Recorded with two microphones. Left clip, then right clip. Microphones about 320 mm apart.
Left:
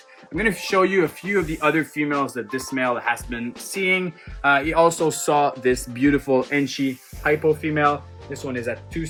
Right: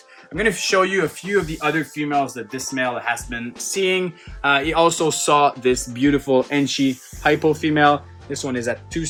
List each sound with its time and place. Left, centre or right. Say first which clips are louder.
0.3 s speech: right 2 dB; centre
7.2 s speech: right 2 dB; right